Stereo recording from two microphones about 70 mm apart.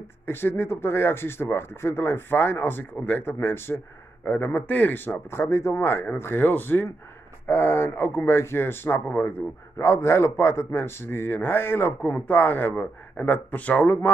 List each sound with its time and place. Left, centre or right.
0.3 s speech: left